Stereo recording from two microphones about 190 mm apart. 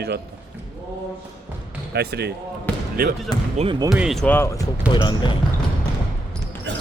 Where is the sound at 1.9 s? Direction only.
60° right (ahead or behind).